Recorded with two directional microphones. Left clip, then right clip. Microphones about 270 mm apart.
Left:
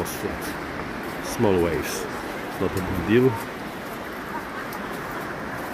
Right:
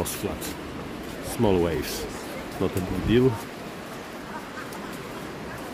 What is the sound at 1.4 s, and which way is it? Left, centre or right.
Speech, centre.